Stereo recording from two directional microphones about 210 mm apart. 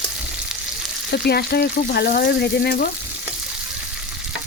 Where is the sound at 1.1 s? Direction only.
50° left (ahead or behind).